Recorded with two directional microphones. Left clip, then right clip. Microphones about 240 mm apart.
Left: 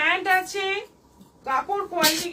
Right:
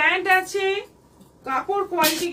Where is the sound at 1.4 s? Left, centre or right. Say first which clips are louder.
Left 1 dB; centre.